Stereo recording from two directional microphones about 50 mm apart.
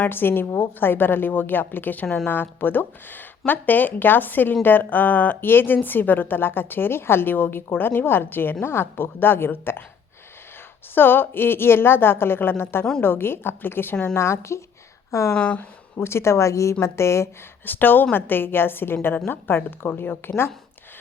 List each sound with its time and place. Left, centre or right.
0.1 s a woman's voice: left
10.9 s a woman's voice: left
14.2 s speech: left
16.0 s speech: left
16.8 s speech: left
17.7 s a woman's voice: left